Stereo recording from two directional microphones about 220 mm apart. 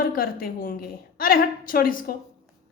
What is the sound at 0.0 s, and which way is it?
A woman's voice, 40° left (ahead or behind).